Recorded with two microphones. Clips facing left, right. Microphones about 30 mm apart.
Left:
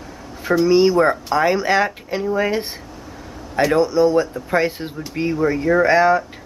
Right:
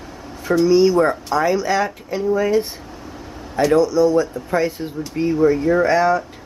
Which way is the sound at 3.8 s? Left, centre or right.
Left.